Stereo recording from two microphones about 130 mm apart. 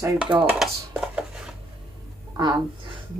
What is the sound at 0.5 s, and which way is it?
Dishes, 5° right (ahead or behind).